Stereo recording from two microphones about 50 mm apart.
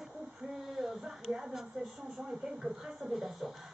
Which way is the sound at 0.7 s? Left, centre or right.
Centre.